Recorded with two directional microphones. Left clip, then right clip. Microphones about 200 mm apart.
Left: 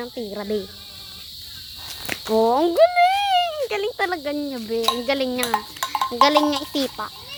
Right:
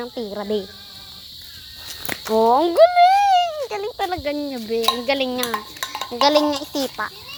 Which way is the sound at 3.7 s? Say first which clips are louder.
Left 2 dB; 20° left (ahead or behind).